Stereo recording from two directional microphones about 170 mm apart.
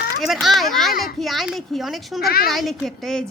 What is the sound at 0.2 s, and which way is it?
A woman's voice, centre (ahead or behind).